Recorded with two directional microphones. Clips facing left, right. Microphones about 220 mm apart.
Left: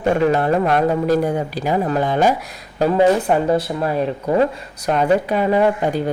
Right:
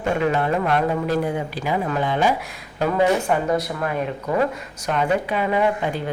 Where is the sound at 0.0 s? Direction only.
40° left (ahead or behind).